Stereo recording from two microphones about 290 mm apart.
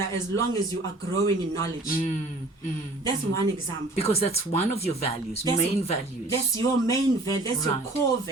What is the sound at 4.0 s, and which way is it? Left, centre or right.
A woman's voice, left.